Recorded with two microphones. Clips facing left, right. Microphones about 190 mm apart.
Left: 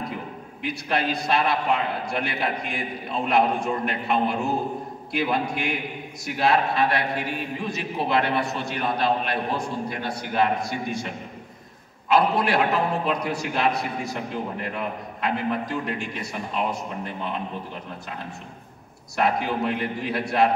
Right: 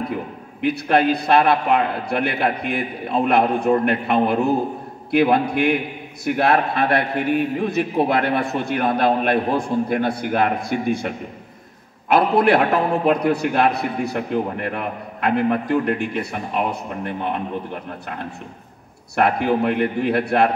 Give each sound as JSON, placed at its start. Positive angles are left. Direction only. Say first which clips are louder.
{"t": 0.6, "sound": "a man's voice", "louder": "right 9 dB", "side_deg": -55}
{"t": 19.1, "sound": "a man's voice", "louder": "right 5 dB", "side_deg": -60}